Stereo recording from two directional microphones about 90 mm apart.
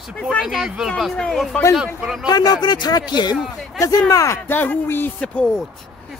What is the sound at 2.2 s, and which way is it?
Speech, 45° left (ahead or behind).